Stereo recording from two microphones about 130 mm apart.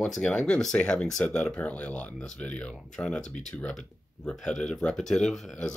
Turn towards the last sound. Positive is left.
turn(degrees=5)  # may be behind; listen again after turning